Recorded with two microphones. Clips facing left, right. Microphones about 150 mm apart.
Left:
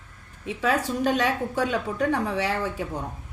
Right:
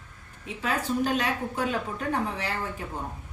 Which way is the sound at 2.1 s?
85° left.